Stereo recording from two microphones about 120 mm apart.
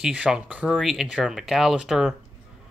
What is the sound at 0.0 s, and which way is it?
Speech, 10° right (ahead or behind).